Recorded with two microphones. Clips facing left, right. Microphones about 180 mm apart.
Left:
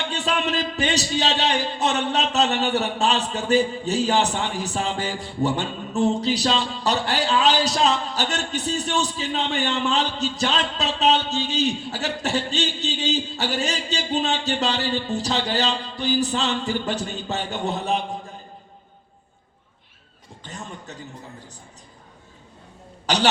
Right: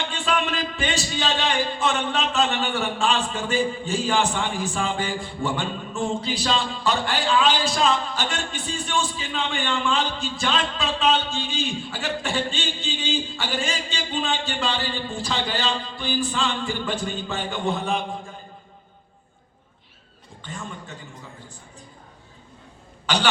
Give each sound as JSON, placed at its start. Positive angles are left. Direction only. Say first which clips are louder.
{"t": 0.1, "sound": "a man's voice", "louder": "left 2 dB", "side_deg": 40}
{"t": 20.4, "sound": "a man's voice", "louder": "right 1 dB", "side_deg": 40}